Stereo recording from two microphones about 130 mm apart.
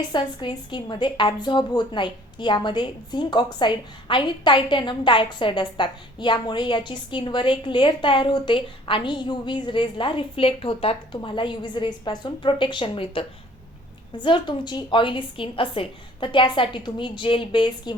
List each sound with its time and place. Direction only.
0.1 s a woman's voice: 35° left (ahead or behind)